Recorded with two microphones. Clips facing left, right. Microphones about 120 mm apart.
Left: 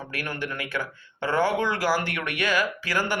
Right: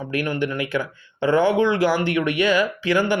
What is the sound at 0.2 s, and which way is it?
Speech, 20° right (ahead or behind).